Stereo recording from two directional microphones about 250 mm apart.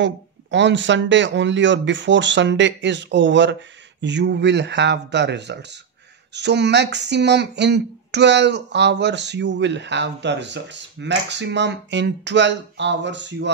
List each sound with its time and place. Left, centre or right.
0.0 s speech: right